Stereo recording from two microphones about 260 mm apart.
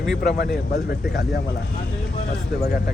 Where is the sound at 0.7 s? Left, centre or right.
Left.